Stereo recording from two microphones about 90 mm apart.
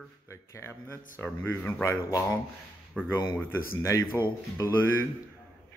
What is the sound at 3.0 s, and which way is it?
Speech, 10° left (ahead or behind).